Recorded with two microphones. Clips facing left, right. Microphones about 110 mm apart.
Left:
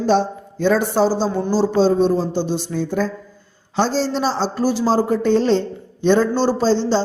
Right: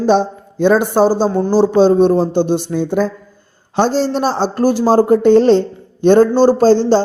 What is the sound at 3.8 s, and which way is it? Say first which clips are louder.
Speech: right 4 dB; 55° right (ahead or behind).